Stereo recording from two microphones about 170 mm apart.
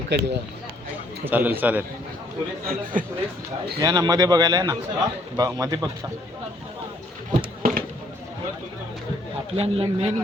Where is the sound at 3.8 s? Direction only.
25° right (ahead or behind).